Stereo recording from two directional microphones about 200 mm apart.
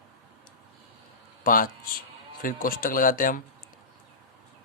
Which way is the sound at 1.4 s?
45° left (ahead or behind).